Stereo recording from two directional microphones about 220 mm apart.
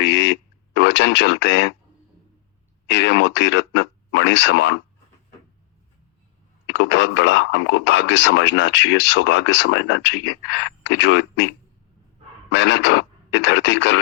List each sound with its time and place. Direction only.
0.0 s speech: 55° left (ahead or behind)
2.8 s speech: 55° left (ahead or behind)
6.7 s speech: 55° left (ahead or behind)
12.5 s speech: 55° left (ahead or behind)